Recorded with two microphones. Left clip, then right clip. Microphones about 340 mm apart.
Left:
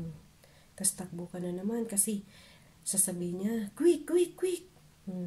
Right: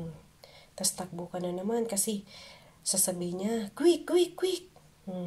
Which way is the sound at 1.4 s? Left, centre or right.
Right.